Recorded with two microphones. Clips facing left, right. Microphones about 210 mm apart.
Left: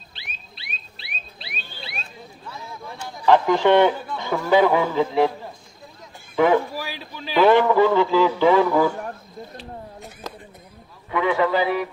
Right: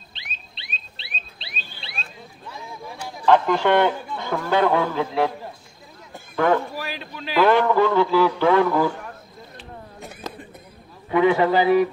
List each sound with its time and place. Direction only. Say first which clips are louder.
0.1 s a sound: left 1 dB; 25° right (ahead or behind)
2.5 s a sound: right 1 dB; 5° right (ahead or behind)
3.5 s speech: left 3 dB; 15° left (ahead or behind)
6.3 s speech: left 2 dB; 10° left (ahead or behind)
6.8 s a man's voice: right 1 dB; centre (ahead or behind)
8.5 s a man's voice: left 1 dB; centre (ahead or behind)
11.1 s a man's voice: right 3 dB; 30° right (ahead or behind)